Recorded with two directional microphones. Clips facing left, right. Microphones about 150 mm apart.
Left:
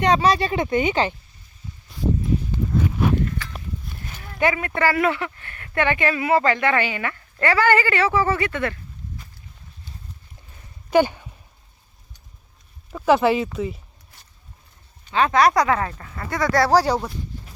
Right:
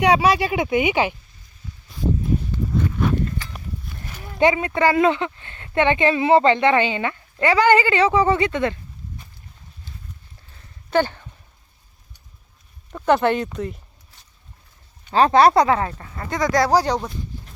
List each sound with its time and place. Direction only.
0.0 s speech: 10° right (ahead or behind)
4.2 s speech: 20° right (ahead or behind)
10.9 s speech: 10° left (ahead or behind)
12.9 s speech: 5° left (ahead or behind)
15.1 s speech: 30° right (ahead or behind); by 16.8 s 15° right (ahead or behind)
16.8 s speech: 5° left (ahead or behind)